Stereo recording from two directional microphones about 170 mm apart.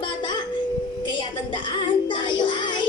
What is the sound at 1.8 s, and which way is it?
Child singing, 30° left (ahead or behind).